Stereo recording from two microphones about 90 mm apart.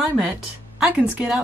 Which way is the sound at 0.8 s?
5° right (ahead or behind).